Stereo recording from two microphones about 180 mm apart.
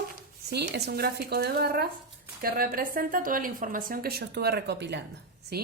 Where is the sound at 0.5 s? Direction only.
65° right (ahead or behind).